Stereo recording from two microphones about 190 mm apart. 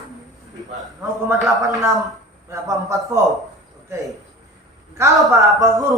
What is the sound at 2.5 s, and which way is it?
Speech, 15° right (ahead or behind).